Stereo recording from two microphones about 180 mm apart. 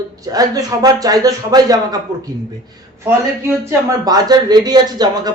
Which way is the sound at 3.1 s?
15° right (ahead or behind).